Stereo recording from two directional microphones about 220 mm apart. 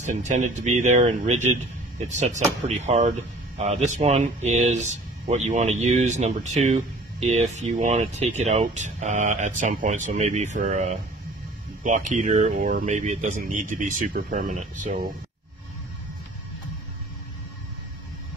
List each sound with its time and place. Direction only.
0.0 s speech: 35° right (ahead or behind)